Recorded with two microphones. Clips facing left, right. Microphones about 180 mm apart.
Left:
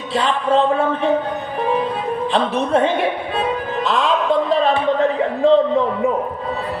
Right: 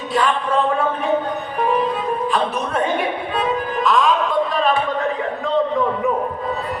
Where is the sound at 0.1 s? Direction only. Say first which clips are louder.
Left 2 dB; 30° left (ahead or behind).